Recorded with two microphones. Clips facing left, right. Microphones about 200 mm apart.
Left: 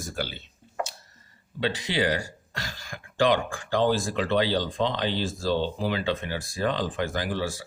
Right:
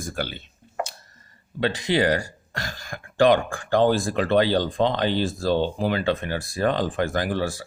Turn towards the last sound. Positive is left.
turn(degrees=-55)  # may be behind; listen again after turning